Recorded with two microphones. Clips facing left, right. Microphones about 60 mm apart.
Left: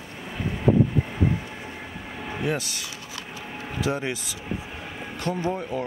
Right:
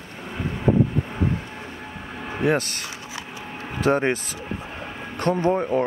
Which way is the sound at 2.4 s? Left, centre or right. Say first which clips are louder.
Right 7 dB; right.